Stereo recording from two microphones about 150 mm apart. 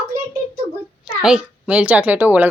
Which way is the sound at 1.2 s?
5° right (ahead or behind).